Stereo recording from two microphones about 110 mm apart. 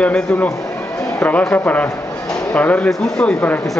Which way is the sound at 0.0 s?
10° left (ahead or behind).